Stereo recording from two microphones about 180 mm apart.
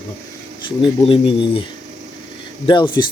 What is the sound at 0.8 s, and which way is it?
Speech, 30° left (ahead or behind).